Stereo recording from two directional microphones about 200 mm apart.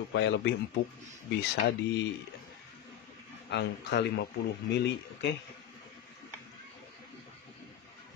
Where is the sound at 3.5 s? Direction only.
60° left (ahead or behind).